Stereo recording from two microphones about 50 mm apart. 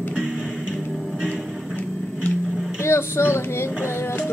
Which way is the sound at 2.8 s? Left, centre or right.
Left.